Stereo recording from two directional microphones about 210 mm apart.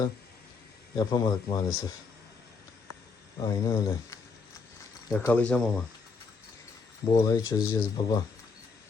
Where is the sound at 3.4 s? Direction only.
15° left (ahead or behind).